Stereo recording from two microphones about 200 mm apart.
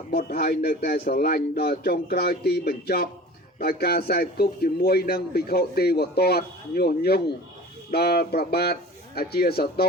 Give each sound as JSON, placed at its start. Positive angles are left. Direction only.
{"t": 0.1, "sound": "a man's voice", "side_deg": 50}